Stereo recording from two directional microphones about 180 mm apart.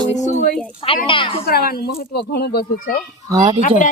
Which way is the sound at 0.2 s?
40° left (ahead or behind).